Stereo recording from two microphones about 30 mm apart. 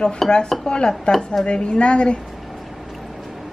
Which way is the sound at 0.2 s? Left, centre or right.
Centre.